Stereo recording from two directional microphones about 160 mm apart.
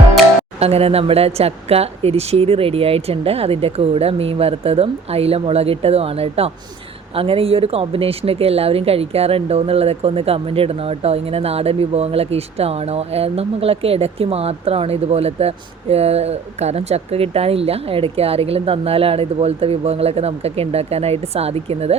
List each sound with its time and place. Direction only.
0.6 s speech: 40° right (ahead or behind)